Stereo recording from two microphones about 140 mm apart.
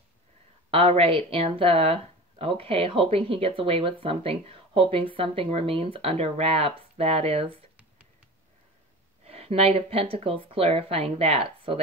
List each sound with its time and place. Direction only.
0.7 s speech: 40° right (ahead or behind)
9.2 s speech: 45° right (ahead or behind)